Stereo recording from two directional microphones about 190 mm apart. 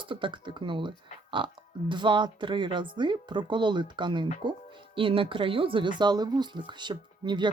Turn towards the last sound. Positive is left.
turn(degrees=-25)  # may be behind; listen again after turning